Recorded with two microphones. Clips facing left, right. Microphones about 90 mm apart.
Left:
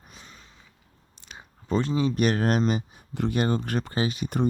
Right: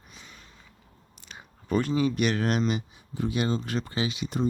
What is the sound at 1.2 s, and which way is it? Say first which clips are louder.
Speech: left 1 dB; 25° left (ahead or behind).